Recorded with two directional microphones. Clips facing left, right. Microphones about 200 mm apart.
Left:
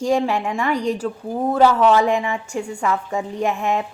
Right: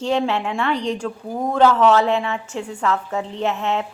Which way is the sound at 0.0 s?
10° left (ahead or behind).